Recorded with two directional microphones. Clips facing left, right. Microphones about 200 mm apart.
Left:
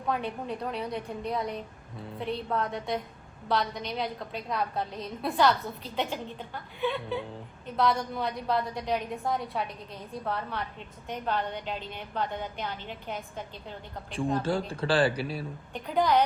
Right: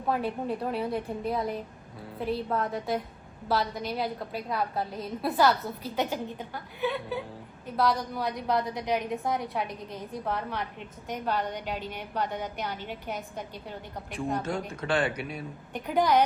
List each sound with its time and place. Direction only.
0.1 s a woman's voice: 5° right (ahead or behind)
8.4 s a woman's voice: 20° right (ahead or behind)
14.4 s speech: 30° left (ahead or behind)
15.7 s a woman's voice: 15° right (ahead or behind)